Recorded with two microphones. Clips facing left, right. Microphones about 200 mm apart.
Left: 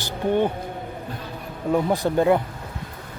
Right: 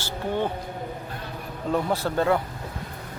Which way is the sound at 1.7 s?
15° left (ahead or behind).